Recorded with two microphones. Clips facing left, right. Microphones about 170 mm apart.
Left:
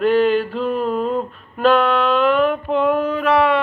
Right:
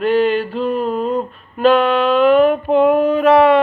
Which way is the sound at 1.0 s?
15° right (ahead or behind).